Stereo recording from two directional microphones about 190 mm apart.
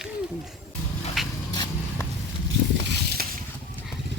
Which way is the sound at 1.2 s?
Centre (ahead or behind).